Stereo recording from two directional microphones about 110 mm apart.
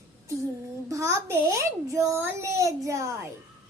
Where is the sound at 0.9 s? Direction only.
25° right (ahead or behind).